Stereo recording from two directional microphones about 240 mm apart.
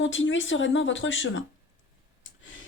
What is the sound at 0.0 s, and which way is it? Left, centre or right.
A woman's voice, left.